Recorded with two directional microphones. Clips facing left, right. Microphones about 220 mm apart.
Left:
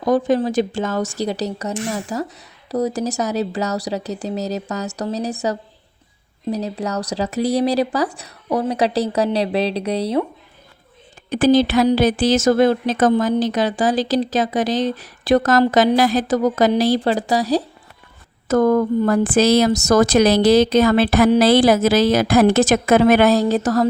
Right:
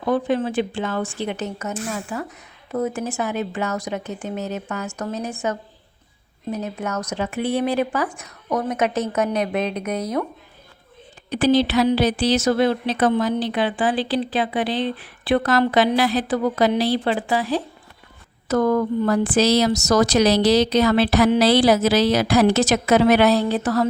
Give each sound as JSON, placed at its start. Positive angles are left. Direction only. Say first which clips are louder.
{"t": 0.0, "sound": "speech", "louder": "left 4 dB", "side_deg": 40}
{"t": 11.3, "sound": "speech", "louder": "left 3 dB", "side_deg": 45}